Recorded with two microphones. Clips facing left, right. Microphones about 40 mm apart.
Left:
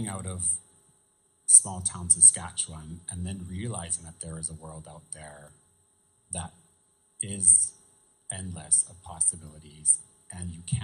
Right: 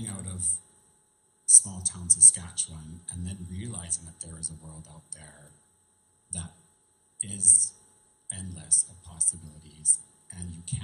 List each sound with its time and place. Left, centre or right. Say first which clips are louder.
0.2 s speech: left 2 dB; left
7.2 s speech: left 1 dB; left